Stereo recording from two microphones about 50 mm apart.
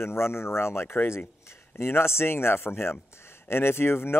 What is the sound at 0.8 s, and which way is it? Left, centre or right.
Speech, left.